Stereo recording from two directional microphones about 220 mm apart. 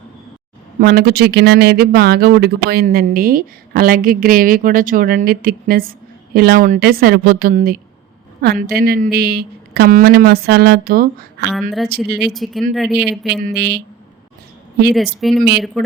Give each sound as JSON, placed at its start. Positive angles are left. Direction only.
{"t": 0.8, "sound": "a woman's voice", "side_deg": -45}
{"t": 12.3, "sound": "speech", "side_deg": 0}
{"t": 13.4, "sound": "a woman's voice", "side_deg": -50}
{"t": 14.9, "sound": "speech", "side_deg": 0}